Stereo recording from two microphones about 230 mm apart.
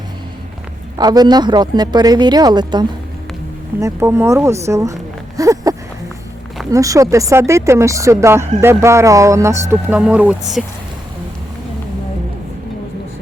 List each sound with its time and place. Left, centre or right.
0.9 s speech: centre
5.4 s a sound: centre
6.7 s speech: centre